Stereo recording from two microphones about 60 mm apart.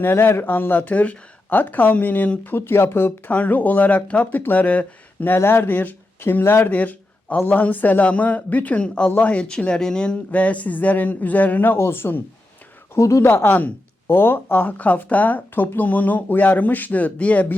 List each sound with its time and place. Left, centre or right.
0.0 s speech: left
2.6 s speech: left
3.3 s speech: left
5.4 s speech: left
6.4 s speech: left
6.7 s speech: left
13.0 s speech: left
13.2 s speech: left